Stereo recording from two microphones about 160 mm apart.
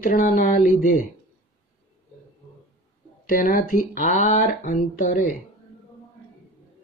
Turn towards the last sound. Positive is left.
turn(degrees=55)  # may be behind; listen again after turning